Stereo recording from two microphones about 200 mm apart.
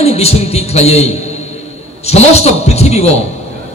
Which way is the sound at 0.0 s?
30° left (ahead or behind).